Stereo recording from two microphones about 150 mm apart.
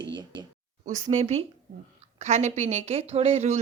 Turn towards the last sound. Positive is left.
turn(degrees=-45)  # may be behind; listen again after turning